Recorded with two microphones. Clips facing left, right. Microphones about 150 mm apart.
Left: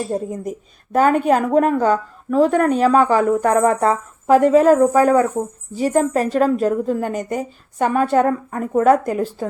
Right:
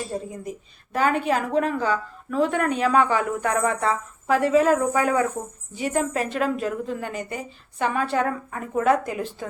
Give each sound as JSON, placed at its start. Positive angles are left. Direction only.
{"t": 0.1, "sound": "a woman's voice", "side_deg": 45}